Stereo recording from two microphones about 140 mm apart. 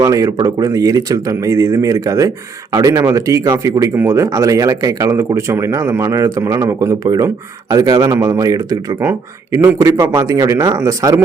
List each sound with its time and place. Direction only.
0.0 s speech: 25° right (ahead or behind)